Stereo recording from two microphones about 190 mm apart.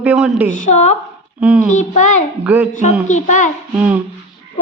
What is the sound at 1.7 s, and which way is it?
A child's voice, 40° left (ahead or behind).